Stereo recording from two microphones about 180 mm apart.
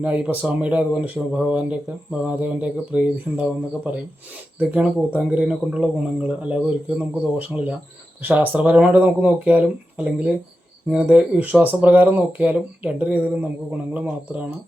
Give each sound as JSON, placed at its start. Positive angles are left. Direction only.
{"t": 0.0, "sound": "speech", "side_deg": -10}